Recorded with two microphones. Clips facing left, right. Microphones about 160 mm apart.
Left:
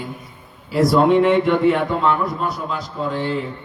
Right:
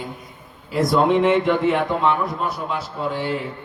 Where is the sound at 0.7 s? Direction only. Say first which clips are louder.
Left 3 dB; centre (ahead or behind).